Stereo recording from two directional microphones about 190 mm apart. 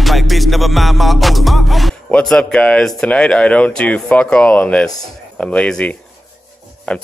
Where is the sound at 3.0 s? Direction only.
5° left (ahead or behind).